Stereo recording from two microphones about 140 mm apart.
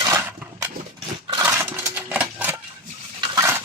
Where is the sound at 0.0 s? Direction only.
20° right (ahead or behind).